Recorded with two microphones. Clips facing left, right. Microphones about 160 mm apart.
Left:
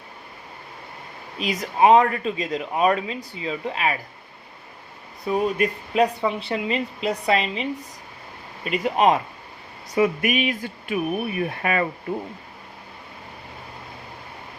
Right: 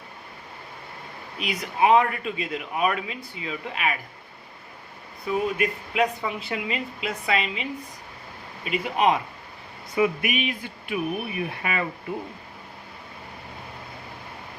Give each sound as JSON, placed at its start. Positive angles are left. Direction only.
{"t": 1.4, "sound": "speech", "side_deg": 35}
{"t": 5.2, "sound": "speech", "side_deg": 35}
{"t": 9.9, "sound": "a sound", "side_deg": 45}